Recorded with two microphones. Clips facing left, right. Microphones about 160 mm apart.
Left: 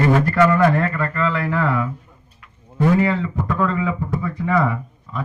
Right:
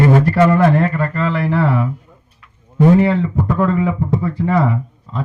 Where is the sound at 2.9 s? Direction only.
25° right (ahead or behind).